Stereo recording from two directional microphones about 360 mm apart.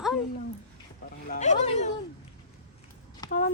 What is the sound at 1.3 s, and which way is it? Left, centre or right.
Speech, centre.